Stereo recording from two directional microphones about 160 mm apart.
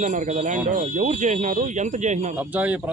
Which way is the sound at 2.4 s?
10° right (ahead or behind).